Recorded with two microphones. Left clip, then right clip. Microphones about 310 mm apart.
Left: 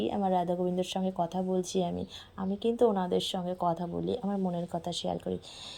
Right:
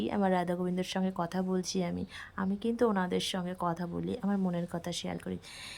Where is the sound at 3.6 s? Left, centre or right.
Right.